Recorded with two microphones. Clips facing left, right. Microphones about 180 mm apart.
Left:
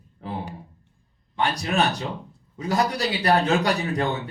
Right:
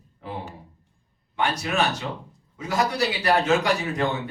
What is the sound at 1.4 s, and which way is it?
A man's voice, 35° left (ahead or behind).